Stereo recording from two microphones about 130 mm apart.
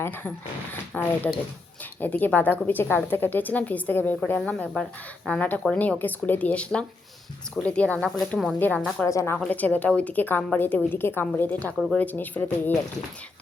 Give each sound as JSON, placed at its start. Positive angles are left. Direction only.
{"t": 0.0, "sound": "speech", "side_deg": 15}
{"t": 9.0, "sound": "a woman's voice", "side_deg": 20}